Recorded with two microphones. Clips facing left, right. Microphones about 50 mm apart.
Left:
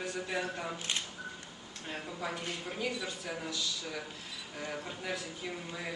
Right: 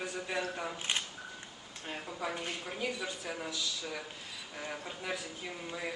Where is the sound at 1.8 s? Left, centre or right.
Centre.